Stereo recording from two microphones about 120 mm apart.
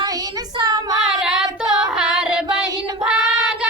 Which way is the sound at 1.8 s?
5° right (ahead or behind).